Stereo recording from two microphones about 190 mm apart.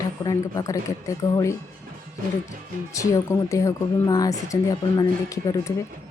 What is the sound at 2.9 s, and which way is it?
A woman's voice, 15° left (ahead or behind).